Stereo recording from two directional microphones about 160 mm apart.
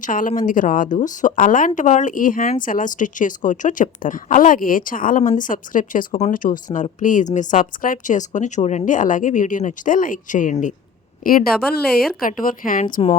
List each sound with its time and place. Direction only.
0.0 s a woman's voice: 55° left (ahead or behind)
11.2 s a woman's voice: 65° left (ahead or behind)